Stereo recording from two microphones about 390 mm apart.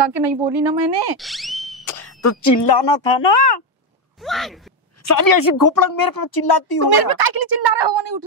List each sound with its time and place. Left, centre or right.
0.0 s a woman's voice: right
1.1 s a sound: centre
2.2 s speech: left
2.7 s speech: left
4.2 s speech: centre
5.0 s a woman's voice: left
6.9 s speech: right